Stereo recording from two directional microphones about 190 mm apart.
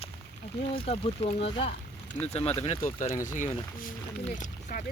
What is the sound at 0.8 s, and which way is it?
Speech, 30° left (ahead or behind).